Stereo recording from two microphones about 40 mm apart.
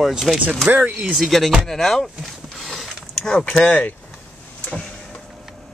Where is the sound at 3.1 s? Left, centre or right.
Centre.